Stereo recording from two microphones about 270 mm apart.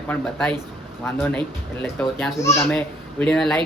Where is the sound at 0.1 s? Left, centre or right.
Centre.